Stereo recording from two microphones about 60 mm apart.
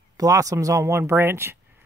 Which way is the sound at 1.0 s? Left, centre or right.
Right.